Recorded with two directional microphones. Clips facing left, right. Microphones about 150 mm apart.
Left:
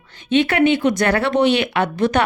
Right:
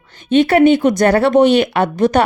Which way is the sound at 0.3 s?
40° right (ahead or behind).